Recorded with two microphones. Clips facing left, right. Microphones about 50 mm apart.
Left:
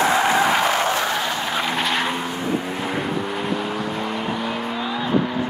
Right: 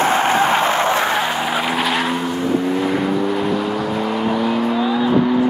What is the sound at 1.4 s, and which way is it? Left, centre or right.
Vehicle, centre.